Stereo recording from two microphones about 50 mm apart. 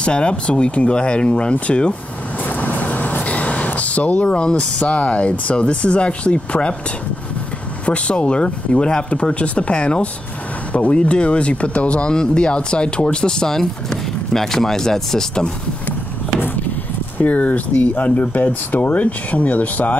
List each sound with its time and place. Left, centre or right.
0.0 s speech: left
2.4 s vehicle: left
4.3 s speech: centre
7.8 s speech: left
17.2 s speech: left